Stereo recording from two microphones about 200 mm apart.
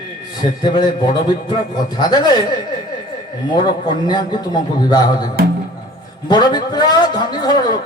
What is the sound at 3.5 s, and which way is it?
Speech, 20° left (ahead or behind).